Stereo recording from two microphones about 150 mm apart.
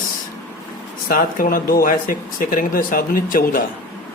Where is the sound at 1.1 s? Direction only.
70° left (ahead or behind).